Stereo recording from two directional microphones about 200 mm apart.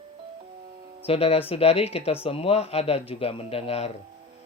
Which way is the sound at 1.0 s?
30° left (ahead or behind).